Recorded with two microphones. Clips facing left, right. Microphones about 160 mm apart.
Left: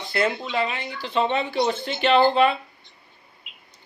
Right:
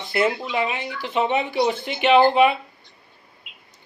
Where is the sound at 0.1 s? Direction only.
20° right (ahead or behind).